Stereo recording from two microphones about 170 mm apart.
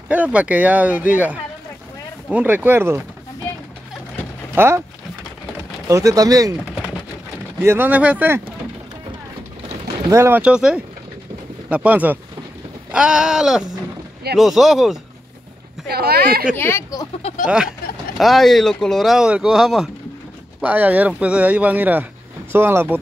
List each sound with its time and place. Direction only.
0.1 s speech: 10° right (ahead or behind)
4.6 s speech: 15° right (ahead or behind)
5.9 s speech: 20° right (ahead or behind)
7.6 s speech: 10° right (ahead or behind)
10.0 s speech: 15° right (ahead or behind)
15.9 s speech: 65° right (ahead or behind)
16.5 s speech: 15° left (ahead or behind)
18.1 s speech: centre (ahead or behind)